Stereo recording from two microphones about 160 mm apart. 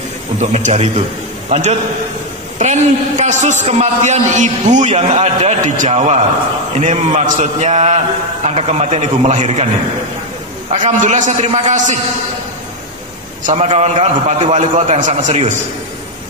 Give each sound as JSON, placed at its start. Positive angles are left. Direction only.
{"t": 0.4, "sound": "a man's voice", "side_deg": -45}
{"t": 10.7, "sound": "a man's voice", "side_deg": -50}
{"t": 13.7, "sound": "a man's voice", "side_deg": -45}